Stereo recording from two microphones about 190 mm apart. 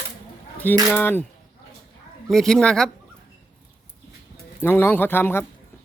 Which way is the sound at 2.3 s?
5° left (ahead or behind).